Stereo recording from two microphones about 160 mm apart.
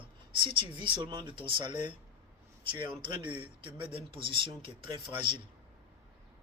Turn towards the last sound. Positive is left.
turn(degrees=-30)  # may be behind; listen again after turning